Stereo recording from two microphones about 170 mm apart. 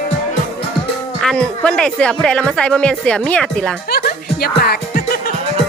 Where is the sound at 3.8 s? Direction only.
65° left (ahead or behind).